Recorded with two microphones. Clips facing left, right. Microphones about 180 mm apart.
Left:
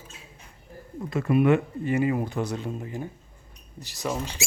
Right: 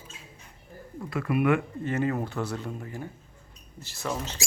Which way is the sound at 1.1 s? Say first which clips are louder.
Left 4 dB; 25° left (ahead or behind).